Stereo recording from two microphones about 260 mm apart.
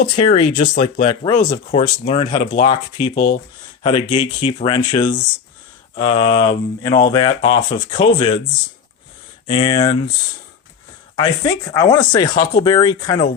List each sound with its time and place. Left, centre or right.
0.2 s speech: left
3.8 s speech: left
9.5 s speech: left
11.2 s speech: centre